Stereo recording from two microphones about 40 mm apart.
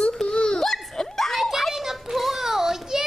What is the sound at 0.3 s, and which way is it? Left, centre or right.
Baby cry, centre.